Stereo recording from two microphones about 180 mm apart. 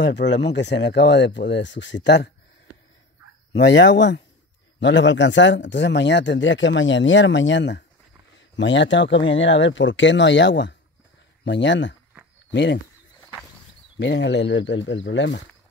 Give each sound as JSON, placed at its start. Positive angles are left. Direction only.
{"t": 0.0, "sound": "speech", "side_deg": 80}
{"t": 3.5, "sound": "speech", "side_deg": 85}
{"t": 13.9, "sound": "speech", "side_deg": 75}